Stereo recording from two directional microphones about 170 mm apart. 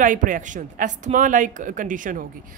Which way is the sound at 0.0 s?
50° right (ahead or behind).